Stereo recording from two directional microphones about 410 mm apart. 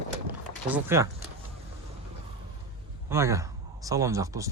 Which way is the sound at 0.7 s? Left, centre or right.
Centre.